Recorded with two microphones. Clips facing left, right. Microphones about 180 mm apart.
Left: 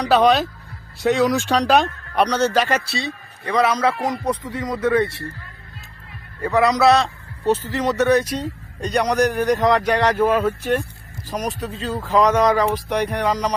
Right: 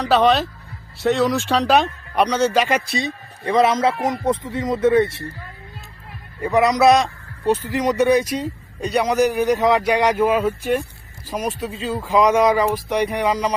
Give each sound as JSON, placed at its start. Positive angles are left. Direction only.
{"t": 0.0, "sound": "speech", "side_deg": 0}
{"t": 6.4, "sound": "a man's voice", "side_deg": -20}